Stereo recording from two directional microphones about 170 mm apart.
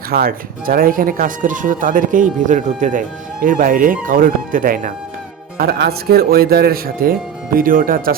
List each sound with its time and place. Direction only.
0.1 s speech: 60° right (ahead or behind)
5.5 s speech: 70° right (ahead or behind)